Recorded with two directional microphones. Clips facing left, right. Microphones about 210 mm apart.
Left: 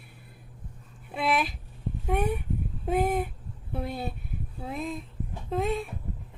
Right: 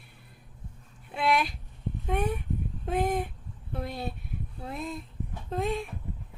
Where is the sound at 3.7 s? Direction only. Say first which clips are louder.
Left 2 dB; 5° left (ahead or behind).